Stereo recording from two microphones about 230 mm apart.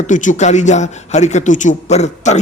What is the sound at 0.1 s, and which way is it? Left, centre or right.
A woman's voice, left.